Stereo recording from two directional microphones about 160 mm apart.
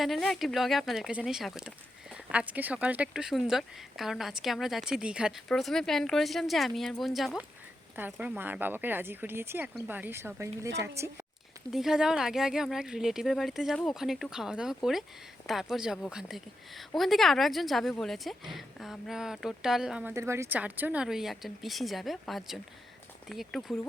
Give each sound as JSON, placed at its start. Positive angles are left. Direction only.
{"t": 0.0, "sound": "speech", "side_deg": 0}
{"t": 11.7, "sound": "speech", "side_deg": 0}
{"t": 20.1, "sound": "speech", "side_deg": -15}